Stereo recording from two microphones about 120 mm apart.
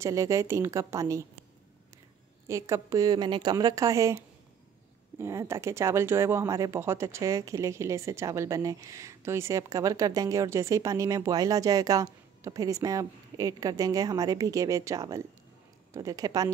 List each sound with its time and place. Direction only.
0.0 s speech: 25° right (ahead or behind)
2.4 s speech: 25° right (ahead or behind)
5.2 s speech: 25° right (ahead or behind)